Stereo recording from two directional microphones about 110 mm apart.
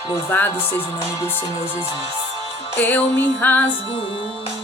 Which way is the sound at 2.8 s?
15° left (ahead or behind).